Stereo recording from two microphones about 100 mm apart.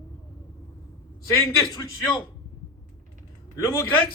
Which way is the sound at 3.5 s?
30° left (ahead or behind).